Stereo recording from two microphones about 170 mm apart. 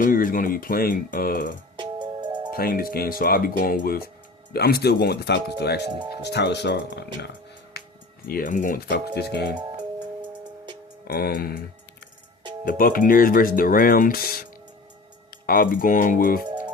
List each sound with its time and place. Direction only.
0.0 s speech: 55° left (ahead or behind)
1.7 s music: 25° right (ahead or behind)
2.6 s speech: 60° left (ahead or behind); by 7.3 s 85° left
8.3 s speech: 55° left (ahead or behind)
11.0 s speech: 60° left (ahead or behind)
12.6 s speech: 55° left (ahead or behind)
15.4 s speech: 55° left (ahead or behind)